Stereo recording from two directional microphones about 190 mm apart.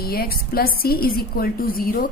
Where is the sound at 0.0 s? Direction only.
50° left (ahead or behind).